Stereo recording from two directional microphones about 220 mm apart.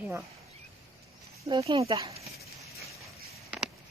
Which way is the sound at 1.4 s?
20° right (ahead or behind).